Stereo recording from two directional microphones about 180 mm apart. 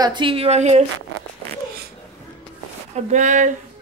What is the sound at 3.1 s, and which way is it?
Speech, 40° right (ahead or behind).